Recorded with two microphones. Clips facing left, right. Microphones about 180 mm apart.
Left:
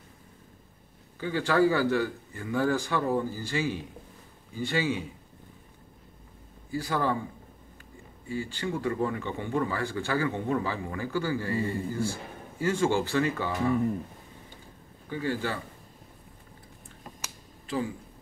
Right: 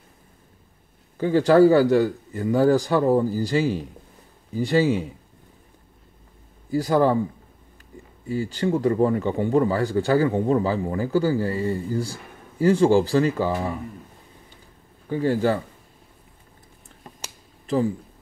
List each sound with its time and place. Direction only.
1.1 s speech: 45° right (ahead or behind)
6.7 s speech: 40° right (ahead or behind)
8.3 s speech: 40° right (ahead or behind)
15.0 s speech: 40° right (ahead or behind)
17.2 s finger snapping: 40° right (ahead or behind)